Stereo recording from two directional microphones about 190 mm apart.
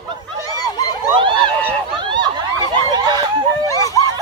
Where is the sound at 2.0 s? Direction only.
25° right (ahead or behind).